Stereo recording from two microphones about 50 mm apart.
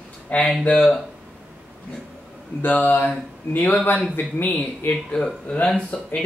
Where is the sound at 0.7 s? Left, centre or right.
Centre.